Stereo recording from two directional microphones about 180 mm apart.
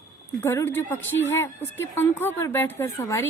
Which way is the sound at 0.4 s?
15° left (ahead or behind).